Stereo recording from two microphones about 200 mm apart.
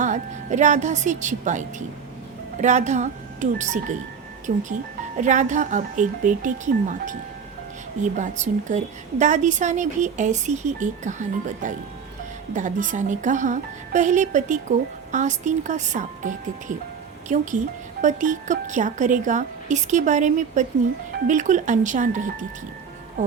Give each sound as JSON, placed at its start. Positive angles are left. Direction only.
{"t": 0.0, "sound": "speech", "side_deg": -40}